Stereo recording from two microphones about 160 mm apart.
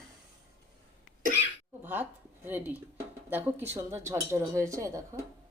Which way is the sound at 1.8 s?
10° right (ahead or behind).